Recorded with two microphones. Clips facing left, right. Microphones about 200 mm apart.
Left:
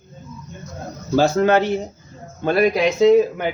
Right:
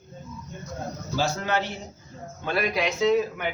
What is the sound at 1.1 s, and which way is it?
A man's voice, 50° left (ahead or behind).